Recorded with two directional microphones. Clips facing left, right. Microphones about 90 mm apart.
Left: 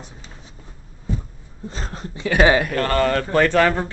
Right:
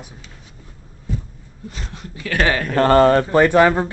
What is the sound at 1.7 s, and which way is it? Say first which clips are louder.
Speech: left 3 dB; 35° left (ahead or behind).